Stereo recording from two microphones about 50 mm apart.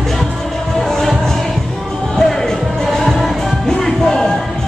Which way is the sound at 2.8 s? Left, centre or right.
Centre.